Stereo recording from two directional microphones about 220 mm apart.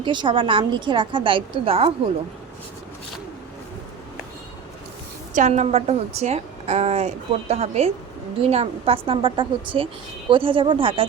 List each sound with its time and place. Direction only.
0.0 s a woman's voice: 20° right (ahead or behind)
5.3 s a woman's voice: 35° right (ahead or behind)